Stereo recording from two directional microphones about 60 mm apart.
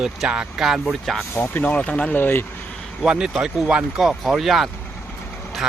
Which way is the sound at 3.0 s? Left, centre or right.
Centre.